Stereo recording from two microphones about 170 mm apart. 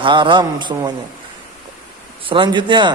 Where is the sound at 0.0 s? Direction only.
30° right (ahead or behind).